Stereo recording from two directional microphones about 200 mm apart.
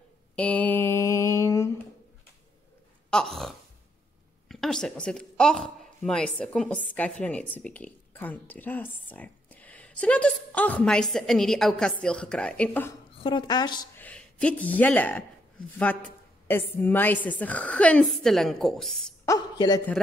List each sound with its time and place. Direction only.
0.4 s mantra: 10° left (ahead or behind)
3.1 s a woman's voice: 5° left (ahead or behind)
13.2 s a woman's voice: 25° left (ahead or behind)
13.9 s a woman's voice: 5° left (ahead or behind)
19.2 s a woman's voice: 15° left (ahead or behind)